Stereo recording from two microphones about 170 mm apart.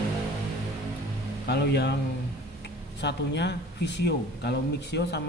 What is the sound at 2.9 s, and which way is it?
Speech, 90° left.